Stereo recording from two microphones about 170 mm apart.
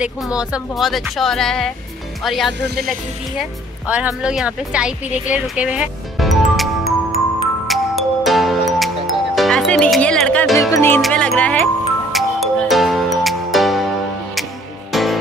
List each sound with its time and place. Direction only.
0.0 s speech: 5° right (ahead or behind)
2.6 s music: 70° right (ahead or behind)
3.8 s speech: 5° right (ahead or behind)
5.3 s music: 5° right (ahead or behind)
10.7 s music: 15° left (ahead or behind)
11.0 s music: centre (ahead or behind)
14.9 s music: centre (ahead or behind)